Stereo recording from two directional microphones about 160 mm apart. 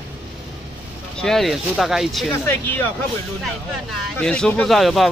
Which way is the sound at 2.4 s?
15° left (ahead or behind).